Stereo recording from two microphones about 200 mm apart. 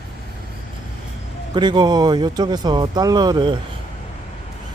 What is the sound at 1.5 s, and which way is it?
Speech, 20° right (ahead or behind).